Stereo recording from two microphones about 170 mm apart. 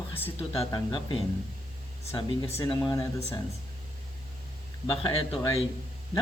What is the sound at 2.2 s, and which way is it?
Speech, 25° left (ahead or behind).